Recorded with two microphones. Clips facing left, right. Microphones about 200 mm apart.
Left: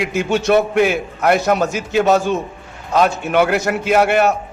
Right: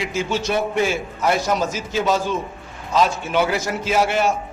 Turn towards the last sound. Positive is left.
turn(degrees=60)  # may be behind; listen again after turning